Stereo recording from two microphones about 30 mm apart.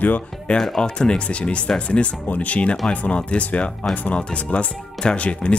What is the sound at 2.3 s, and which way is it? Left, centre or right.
Speech, left.